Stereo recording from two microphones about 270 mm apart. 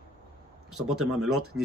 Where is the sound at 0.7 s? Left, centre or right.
Centre.